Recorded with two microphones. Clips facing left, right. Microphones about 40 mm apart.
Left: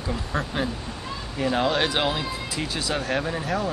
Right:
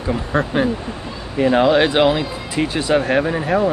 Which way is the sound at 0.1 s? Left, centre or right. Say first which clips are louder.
Right 9 dB; right.